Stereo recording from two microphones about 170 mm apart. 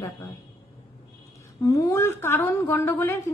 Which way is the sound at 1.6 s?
20° left (ahead or behind).